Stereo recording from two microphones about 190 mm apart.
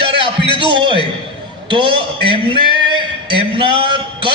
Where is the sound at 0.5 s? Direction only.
25° right (ahead or behind).